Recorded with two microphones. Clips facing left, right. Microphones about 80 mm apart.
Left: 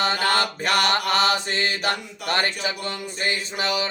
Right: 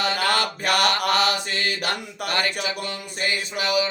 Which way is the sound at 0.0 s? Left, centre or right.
Left.